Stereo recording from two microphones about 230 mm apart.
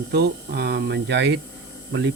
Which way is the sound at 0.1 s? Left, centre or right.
Right.